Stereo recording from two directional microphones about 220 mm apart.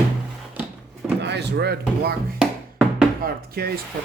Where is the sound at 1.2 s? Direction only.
50° right (ahead or behind).